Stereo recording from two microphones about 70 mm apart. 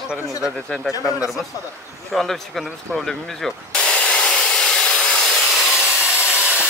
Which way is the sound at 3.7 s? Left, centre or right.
Centre.